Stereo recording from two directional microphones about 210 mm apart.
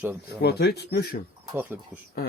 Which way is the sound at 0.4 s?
50° left (ahead or behind).